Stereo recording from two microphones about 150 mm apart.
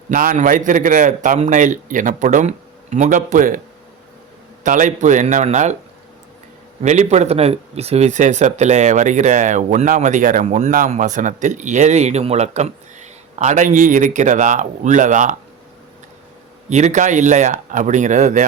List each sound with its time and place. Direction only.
0.1 s speech: 60° right (ahead or behind)
4.6 s speech: 60° right (ahead or behind)
6.8 s speech: 50° right (ahead or behind)
16.6 s speech: 50° right (ahead or behind)